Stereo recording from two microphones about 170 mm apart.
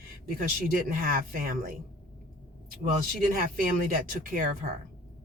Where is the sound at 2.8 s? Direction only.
50° right (ahead or behind).